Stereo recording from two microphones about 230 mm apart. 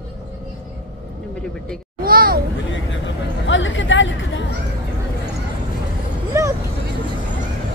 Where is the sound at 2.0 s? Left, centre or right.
Right.